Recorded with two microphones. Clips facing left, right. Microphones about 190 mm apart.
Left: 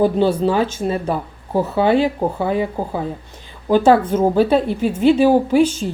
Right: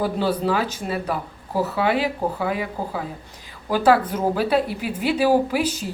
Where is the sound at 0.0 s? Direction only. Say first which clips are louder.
Left 7 dB; 25° left (ahead or behind).